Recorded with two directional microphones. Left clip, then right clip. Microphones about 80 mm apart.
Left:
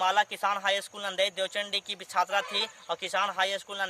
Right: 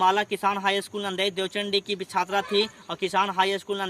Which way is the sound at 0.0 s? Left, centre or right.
Left.